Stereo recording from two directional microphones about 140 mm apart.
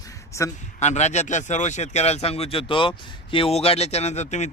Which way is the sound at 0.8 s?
55° left (ahead or behind).